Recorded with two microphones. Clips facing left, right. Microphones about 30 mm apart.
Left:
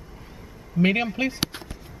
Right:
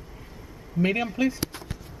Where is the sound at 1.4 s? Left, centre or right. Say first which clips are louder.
Left 3 dB; left.